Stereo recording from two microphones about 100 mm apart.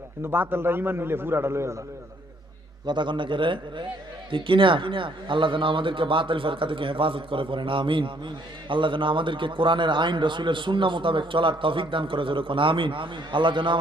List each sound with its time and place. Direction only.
0.2 s a man's voice: 20° right (ahead or behind)
2.8 s a man's voice: 50° right (ahead or behind)